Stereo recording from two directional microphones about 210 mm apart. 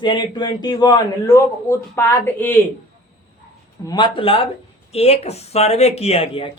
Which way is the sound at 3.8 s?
20° left (ahead or behind).